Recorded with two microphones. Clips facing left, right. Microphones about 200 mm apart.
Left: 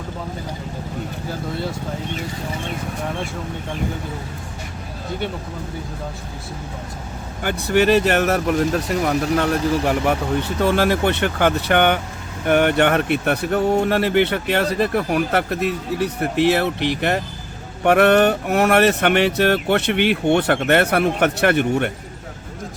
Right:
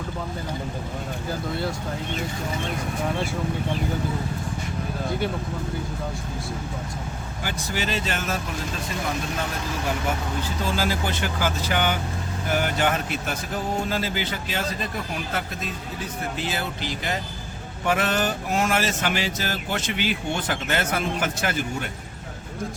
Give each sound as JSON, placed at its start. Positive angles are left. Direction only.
{"t": 7.4, "sound": "speech", "side_deg": 60}